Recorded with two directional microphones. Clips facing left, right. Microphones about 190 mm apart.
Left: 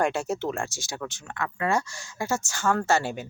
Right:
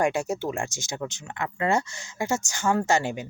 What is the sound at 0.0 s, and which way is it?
Speech, 10° right (ahead or behind).